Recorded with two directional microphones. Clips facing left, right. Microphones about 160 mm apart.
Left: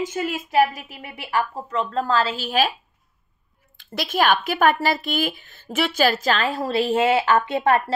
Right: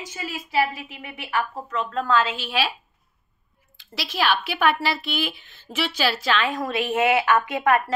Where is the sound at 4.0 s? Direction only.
50° left (ahead or behind); by 7.8 s 30° left (ahead or behind).